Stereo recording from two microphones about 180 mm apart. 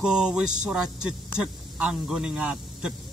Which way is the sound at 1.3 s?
5° right (ahead or behind).